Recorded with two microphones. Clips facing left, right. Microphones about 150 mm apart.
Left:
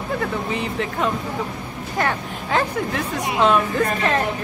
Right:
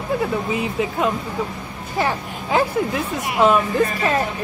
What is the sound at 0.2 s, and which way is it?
A woman's voice, 10° right (ahead or behind).